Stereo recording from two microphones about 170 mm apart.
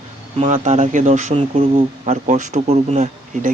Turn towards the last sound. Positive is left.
turn(degrees=-40)  # may be behind; listen again after turning